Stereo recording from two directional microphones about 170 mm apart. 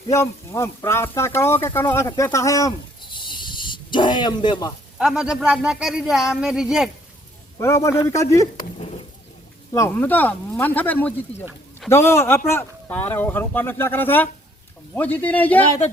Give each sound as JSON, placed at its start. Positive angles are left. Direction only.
{"t": 0.1, "sound": "speech", "side_deg": 20}
{"t": 3.2, "sound": "snake", "side_deg": 30}
{"t": 4.9, "sound": "speech", "side_deg": -5}
{"t": 7.6, "sound": "speech", "side_deg": 15}
{"t": 9.7, "sound": "speech", "side_deg": 15}